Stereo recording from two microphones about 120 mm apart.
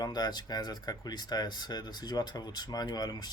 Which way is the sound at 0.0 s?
35° left (ahead or behind).